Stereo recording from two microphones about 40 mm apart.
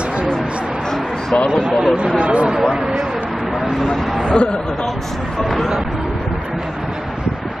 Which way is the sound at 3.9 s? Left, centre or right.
Centre.